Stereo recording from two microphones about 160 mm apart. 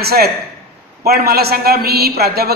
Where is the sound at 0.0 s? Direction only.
80° right.